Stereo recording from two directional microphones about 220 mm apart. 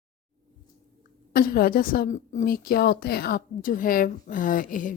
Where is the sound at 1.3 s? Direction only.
40° left (ahead or behind).